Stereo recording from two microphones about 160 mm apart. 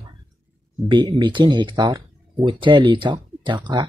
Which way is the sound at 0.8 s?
30° right (ahead or behind).